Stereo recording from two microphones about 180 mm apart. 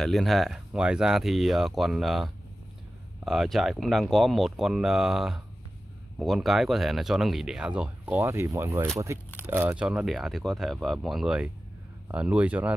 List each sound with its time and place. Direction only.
0.0 s speech: centre (ahead or behind)